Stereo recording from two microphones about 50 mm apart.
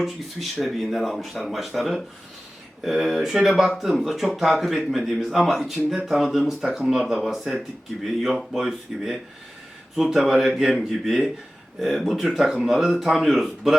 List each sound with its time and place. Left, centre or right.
0.0 s speech: centre
10.8 s speech: centre